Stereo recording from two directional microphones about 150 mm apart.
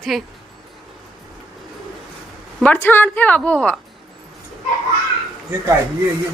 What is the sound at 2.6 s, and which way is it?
A woman's voice, 10° left (ahead or behind).